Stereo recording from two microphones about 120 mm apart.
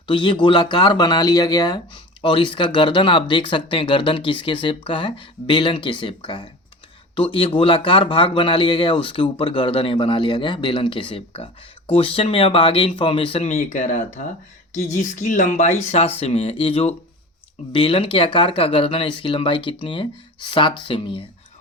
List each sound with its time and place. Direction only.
0.1 s speech: 45° left (ahead or behind)